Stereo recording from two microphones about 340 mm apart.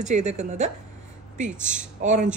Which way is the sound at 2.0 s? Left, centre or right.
Right.